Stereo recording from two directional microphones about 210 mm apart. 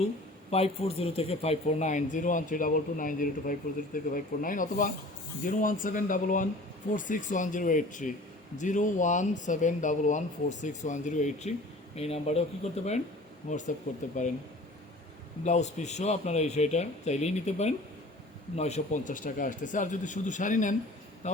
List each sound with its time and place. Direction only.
0.5 s speech: 30° left (ahead or behind)
13.5 s speech: 35° left (ahead or behind)
15.4 s a man's voice: 35° left (ahead or behind)